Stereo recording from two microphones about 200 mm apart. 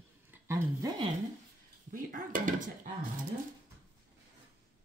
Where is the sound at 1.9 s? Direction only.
40° right (ahead or behind).